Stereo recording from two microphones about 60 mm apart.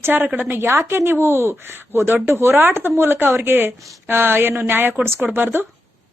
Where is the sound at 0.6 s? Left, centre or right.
Right.